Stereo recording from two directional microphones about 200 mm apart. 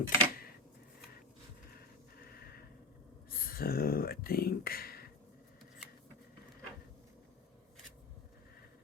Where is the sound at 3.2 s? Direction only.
50° left (ahead or behind).